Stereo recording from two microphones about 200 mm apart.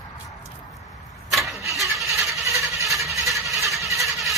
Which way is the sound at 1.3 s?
Centre (ahead or behind).